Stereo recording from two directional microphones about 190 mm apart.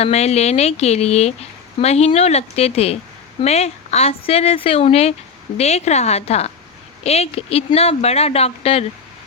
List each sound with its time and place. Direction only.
0.0 s speech: 35° left (ahead or behind)